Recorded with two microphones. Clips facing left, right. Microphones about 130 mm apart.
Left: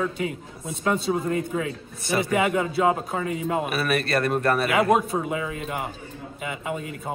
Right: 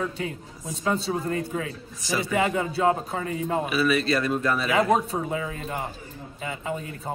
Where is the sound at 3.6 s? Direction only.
55° left (ahead or behind).